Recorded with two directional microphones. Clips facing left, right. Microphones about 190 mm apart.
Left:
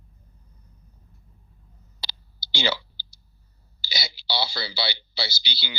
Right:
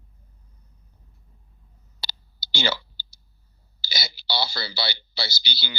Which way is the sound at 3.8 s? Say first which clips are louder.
Even; 45° right (ahead or behind).